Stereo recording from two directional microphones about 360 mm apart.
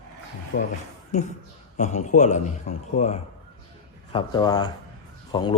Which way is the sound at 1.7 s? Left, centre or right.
Centre.